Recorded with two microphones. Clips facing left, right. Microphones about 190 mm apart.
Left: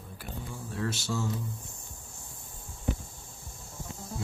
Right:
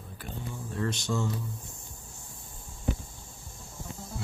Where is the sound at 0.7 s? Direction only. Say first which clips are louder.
Right 2 dB; 5° left (ahead or behind).